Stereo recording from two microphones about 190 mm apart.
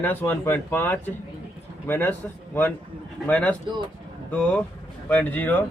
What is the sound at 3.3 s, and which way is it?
Speech, 10° left (ahead or behind).